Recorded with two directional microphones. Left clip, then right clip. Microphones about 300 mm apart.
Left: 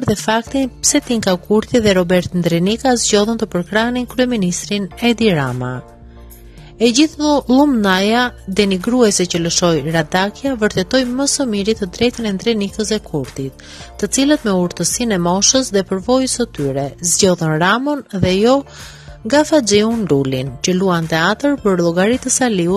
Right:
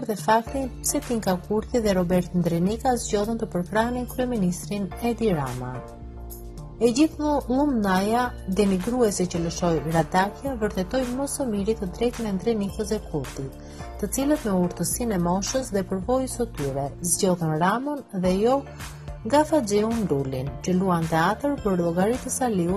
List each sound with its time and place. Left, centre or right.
0.1 s speech: left
6.8 s speech: left